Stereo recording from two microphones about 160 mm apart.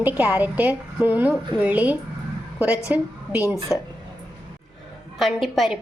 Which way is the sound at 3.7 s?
20° left (ahead or behind).